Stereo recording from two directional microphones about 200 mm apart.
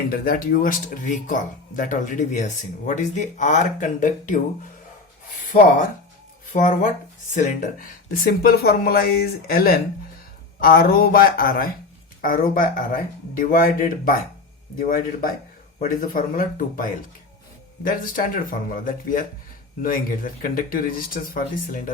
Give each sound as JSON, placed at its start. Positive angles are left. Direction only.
{"t": 0.1, "sound": "speech", "side_deg": 45}
{"t": 6.5, "sound": "speech", "side_deg": 40}